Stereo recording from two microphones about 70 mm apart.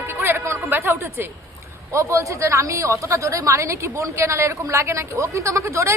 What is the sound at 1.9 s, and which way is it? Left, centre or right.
Speech, right.